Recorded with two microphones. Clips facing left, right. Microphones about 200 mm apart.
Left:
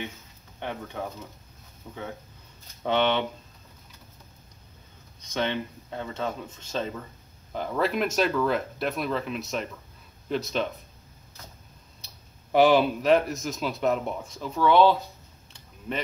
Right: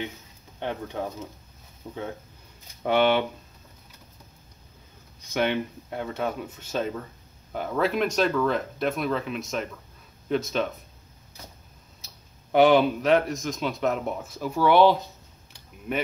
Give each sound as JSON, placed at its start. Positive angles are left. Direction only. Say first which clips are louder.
{"t": 0.6, "sound": "speech", "louder": "right 3 dB", "side_deg": -15}
{"t": 2.8, "sound": "speech", "louder": "right 3 dB", "side_deg": -10}
{"t": 5.3, "sound": "speech", "louder": "right 3 dB", "side_deg": -10}
{"t": 12.0, "sound": "clicking", "louder": "right 1 dB", "side_deg": 0}
{"t": 12.5, "sound": "speech", "louder": "right 1 dB", "side_deg": 0}